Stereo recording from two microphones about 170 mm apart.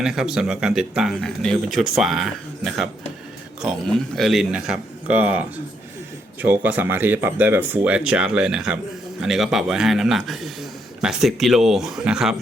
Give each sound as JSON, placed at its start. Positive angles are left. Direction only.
{"t": 0.0, "sound": "a man's voice", "side_deg": -5}